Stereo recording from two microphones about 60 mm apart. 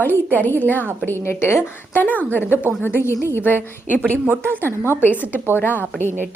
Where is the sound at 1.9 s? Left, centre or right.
Left.